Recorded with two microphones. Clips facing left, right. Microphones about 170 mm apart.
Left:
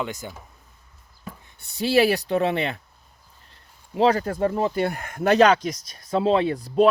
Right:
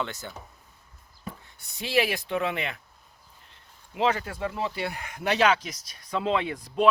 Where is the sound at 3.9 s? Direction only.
35° left (ahead or behind).